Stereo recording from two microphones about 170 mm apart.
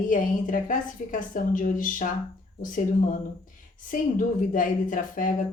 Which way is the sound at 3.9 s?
50° left (ahead or behind).